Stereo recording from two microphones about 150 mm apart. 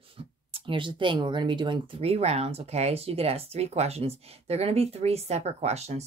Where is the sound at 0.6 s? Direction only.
35° right (ahead or behind).